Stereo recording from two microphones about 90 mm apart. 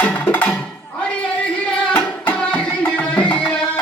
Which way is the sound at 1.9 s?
15° left (ahead or behind).